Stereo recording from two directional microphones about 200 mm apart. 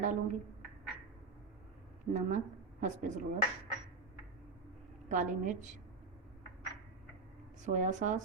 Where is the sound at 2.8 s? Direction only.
40° right (ahead or behind).